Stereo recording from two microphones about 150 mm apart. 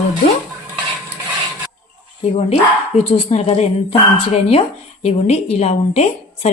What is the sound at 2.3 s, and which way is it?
Speech, 40° left (ahead or behind).